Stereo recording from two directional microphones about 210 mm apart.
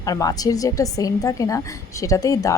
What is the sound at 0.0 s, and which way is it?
A woman's voice, 15° left (ahead or behind).